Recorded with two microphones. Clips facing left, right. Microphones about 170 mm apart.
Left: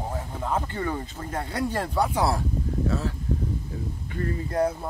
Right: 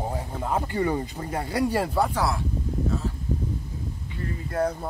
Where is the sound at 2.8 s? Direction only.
75° left (ahead or behind).